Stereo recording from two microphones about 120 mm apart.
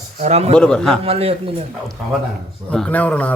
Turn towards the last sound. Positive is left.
turn(degrees=10)  # may be behind; listen again after turning